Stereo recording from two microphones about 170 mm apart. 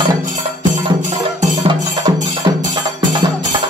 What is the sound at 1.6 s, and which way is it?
Music, 30° right (ahead or behind).